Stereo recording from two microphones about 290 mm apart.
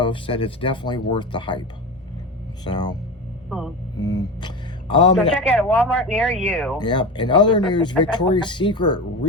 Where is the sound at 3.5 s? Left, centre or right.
Centre.